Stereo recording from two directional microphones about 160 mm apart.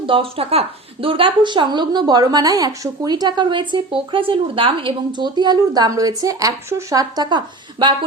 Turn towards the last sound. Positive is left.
turn(degrees=-30)  # may be behind; listen again after turning